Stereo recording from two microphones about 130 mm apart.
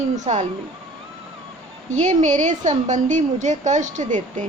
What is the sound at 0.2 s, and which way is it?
Speech, 65° right (ahead or behind).